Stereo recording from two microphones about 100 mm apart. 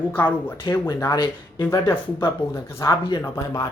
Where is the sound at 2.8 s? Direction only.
45° left (ahead or behind).